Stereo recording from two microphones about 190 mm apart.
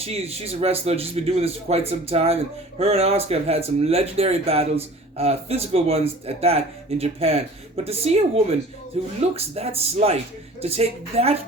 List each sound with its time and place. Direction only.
0.0 s speech: 30° right (ahead or behind)